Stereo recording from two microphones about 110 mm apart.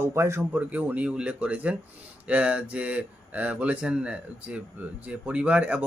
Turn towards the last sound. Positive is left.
turn(degrees=-10)  # may be behind; listen again after turning